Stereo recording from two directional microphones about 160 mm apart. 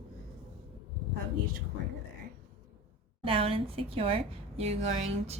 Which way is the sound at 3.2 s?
35° right (ahead or behind).